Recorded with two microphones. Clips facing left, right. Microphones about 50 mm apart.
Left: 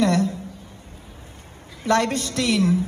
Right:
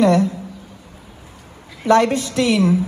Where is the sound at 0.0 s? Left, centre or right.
Right.